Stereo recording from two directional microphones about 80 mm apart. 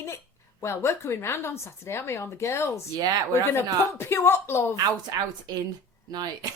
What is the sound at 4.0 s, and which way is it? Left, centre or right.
Speech, left.